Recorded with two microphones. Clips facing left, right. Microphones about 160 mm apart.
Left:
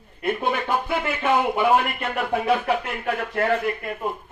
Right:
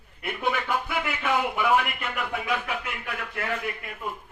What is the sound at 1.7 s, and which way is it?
Speech, 35° left (ahead or behind).